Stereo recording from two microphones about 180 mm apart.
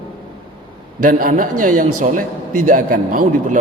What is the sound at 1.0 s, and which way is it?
A man's voice, 50° right (ahead or behind).